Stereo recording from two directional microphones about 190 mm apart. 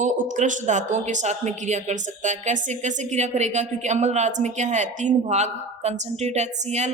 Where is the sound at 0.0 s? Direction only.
40° right (ahead or behind).